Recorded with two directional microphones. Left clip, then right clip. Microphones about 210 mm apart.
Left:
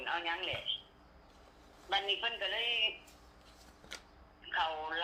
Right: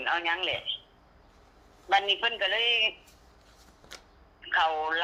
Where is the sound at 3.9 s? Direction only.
15° right (ahead or behind).